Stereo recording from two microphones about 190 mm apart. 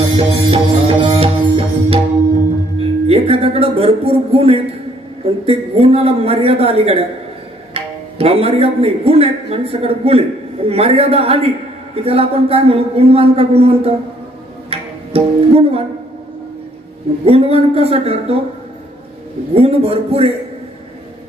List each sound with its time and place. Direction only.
0.2 s music: 30° right (ahead or behind)
3.1 s a man's voice: 30° right (ahead or behind)
14.7 s music: 30° right (ahead or behind)
17.3 s speech: 30° right (ahead or behind)
19.5 s speech: 30° right (ahead or behind)